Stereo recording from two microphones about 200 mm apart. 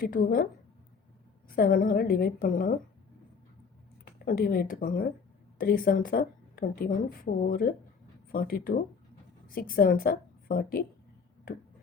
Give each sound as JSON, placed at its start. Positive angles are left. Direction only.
{"t": 0.0, "sound": "a woman's voice", "side_deg": 45}
{"t": 1.5, "sound": "a woman's voice", "side_deg": 45}
{"t": 4.0, "sound": "a woman's voice", "side_deg": 45}